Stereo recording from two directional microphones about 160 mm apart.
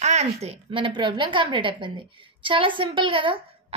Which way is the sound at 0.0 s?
45° right (ahead or behind).